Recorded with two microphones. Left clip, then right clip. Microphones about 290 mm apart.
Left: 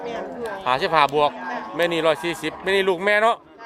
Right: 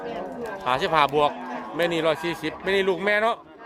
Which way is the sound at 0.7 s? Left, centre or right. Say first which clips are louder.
Left 2 dB; centre.